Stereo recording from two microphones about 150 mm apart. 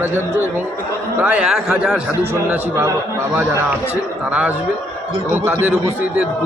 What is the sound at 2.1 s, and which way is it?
Speech, 20° right (ahead or behind).